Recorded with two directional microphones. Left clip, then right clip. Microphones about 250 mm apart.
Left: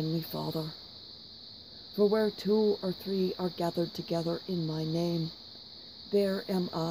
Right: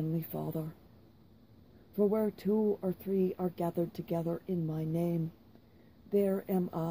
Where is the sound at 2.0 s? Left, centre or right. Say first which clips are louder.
Left 4 dB; left.